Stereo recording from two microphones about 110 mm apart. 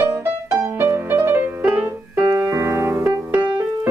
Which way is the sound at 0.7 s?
25° right (ahead or behind).